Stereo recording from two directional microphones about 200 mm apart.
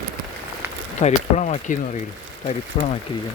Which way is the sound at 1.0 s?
35° left (ahead or behind).